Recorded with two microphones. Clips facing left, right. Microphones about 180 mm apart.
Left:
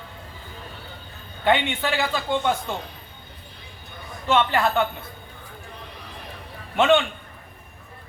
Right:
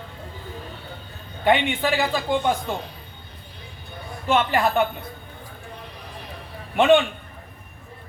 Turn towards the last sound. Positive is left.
turn(degrees=-15)  # may be behind; listen again after turning